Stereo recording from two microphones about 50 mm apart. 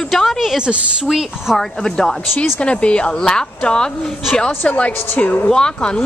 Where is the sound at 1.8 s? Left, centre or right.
Centre.